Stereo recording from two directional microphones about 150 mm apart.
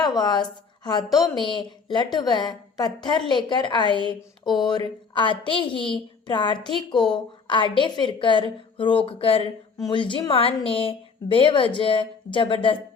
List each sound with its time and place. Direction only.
0.0 s a woman's voice: 25° left (ahead or behind)